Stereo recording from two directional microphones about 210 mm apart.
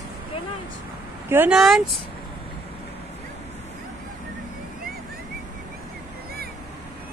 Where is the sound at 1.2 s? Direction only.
10° right (ahead or behind).